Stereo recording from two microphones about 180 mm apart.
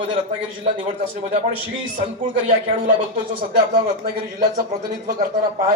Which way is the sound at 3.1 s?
30° right (ahead or behind).